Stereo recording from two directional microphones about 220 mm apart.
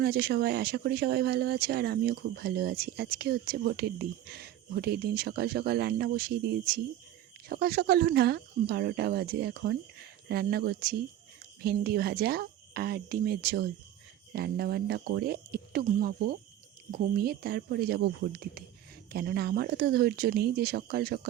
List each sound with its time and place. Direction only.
0.0 s speech: 45° right (ahead or behind)